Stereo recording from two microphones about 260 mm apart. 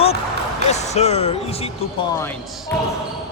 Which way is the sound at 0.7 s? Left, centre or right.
Left.